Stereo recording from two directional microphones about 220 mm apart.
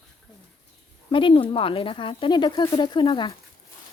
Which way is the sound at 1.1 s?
25° left (ahead or behind).